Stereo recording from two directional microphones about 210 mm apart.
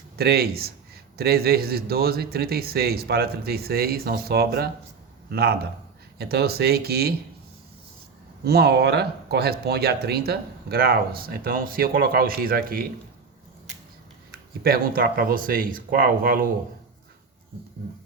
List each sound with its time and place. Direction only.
0.2 s speech: 50° right (ahead or behind)
8.4 s speech: 50° right (ahead or behind)
14.6 s speech: 45° right (ahead or behind)